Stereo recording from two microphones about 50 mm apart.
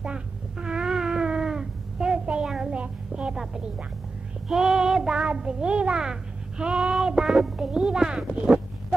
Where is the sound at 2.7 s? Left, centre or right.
Right.